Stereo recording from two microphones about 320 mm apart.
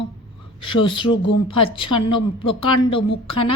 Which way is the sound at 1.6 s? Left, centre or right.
Centre.